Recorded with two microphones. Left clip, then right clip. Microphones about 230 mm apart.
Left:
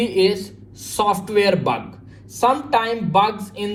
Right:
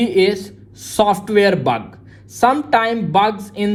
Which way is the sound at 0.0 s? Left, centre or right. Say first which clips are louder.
Right 3 dB; right.